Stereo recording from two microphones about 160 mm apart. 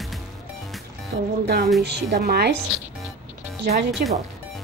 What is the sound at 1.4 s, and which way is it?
A woman's voice, 90° right.